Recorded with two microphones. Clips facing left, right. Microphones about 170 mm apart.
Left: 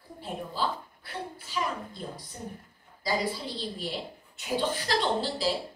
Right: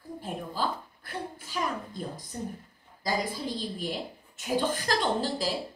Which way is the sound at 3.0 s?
45° right (ahead or behind).